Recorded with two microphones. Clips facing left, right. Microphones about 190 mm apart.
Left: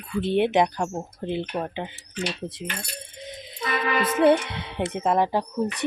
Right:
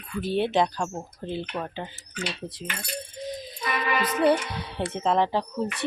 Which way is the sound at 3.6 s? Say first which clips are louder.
Left 2 dB; 25° left (ahead or behind).